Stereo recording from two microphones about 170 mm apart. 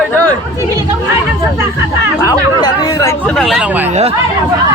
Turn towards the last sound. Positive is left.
turn(degrees=-5)  # may be behind; listen again after turning